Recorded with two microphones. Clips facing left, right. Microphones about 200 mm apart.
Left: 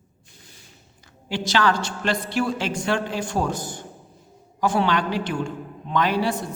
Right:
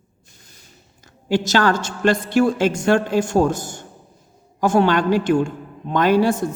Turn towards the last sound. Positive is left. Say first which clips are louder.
# right 6 dB
turn(degrees=-45)  # may be behind; listen again after turning